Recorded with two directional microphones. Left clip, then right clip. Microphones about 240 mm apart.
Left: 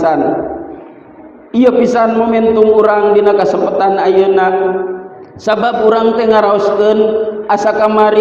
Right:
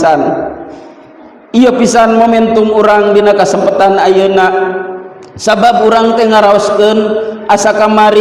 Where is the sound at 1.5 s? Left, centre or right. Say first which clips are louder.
Right 2 dB; right.